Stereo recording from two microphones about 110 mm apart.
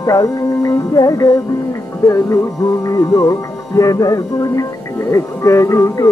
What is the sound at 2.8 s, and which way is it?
Music, 30° left (ahead or behind).